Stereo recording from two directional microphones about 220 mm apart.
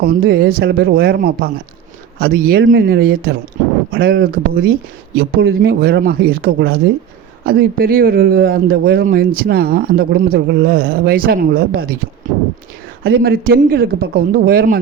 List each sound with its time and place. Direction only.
0.0 s a man's voice: 40° right (ahead or behind)
13.1 s speech: 45° right (ahead or behind)